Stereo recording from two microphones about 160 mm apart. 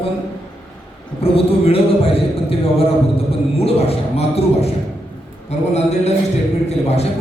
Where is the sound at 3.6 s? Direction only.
40° left (ahead or behind).